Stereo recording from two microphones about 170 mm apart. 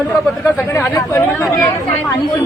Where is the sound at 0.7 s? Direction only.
15° left (ahead or behind).